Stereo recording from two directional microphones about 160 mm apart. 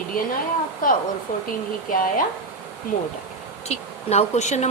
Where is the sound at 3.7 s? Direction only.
45° left (ahead or behind).